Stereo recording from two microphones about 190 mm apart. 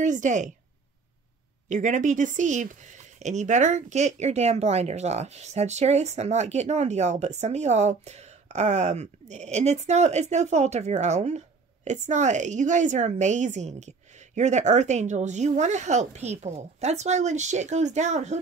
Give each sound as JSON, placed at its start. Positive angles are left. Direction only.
{"t": 0.0, "sound": "speech", "side_deg": -40}
{"t": 1.7, "sound": "speech", "side_deg": -40}